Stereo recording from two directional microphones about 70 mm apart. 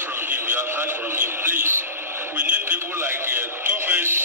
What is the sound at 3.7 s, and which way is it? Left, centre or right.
Synthetic singing, right.